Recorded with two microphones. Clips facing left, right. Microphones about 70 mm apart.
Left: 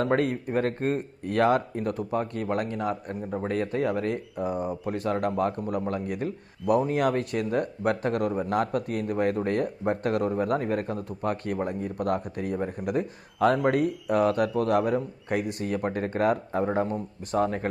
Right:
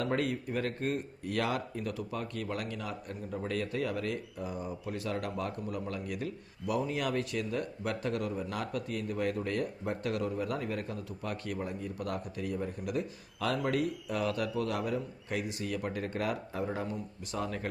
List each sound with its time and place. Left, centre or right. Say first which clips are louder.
0.0 s speech: left 7 dB; left